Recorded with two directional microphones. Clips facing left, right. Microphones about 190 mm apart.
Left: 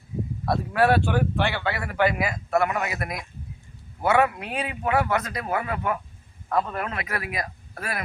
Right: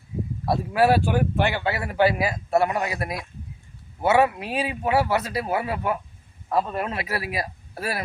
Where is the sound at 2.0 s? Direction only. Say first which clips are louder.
Right 2 dB; 30° right (ahead or behind).